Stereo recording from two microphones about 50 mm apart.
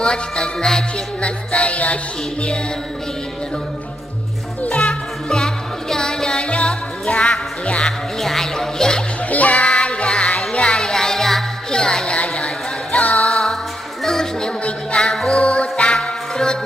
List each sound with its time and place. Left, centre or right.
0.0 s music: centre
4.6 s music: left
5.9 s music: centre
8.2 s music: centre
9.3 s music: left; by 11.4 s centre
11.7 s a sound: centre
12.9 s music: left
13.3 s music: centre